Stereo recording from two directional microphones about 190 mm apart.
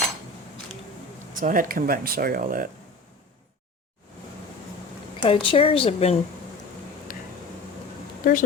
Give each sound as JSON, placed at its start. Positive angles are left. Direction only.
{"t": 1.4, "sound": "speech", "side_deg": -45}
{"t": 5.2, "sound": "a woman's voice", "side_deg": 30}
{"t": 7.1, "sound": "a sound", "side_deg": 45}
{"t": 8.2, "sound": "speech", "side_deg": 45}